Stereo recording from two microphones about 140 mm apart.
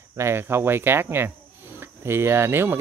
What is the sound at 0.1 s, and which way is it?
Speech, 20° right (ahead or behind).